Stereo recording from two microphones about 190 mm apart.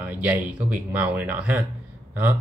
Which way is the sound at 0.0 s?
5° right (ahead or behind).